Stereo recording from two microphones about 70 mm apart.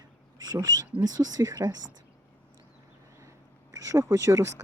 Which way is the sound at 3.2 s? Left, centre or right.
Right.